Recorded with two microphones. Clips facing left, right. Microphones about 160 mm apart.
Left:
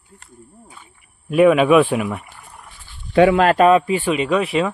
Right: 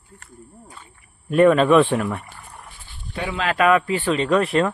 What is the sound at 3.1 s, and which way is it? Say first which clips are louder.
Speech: left 15 dB; 75° left (ahead or behind).